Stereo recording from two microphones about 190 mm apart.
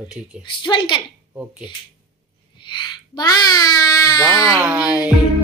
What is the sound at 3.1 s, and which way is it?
A child's voice, 20° left (ahead or behind).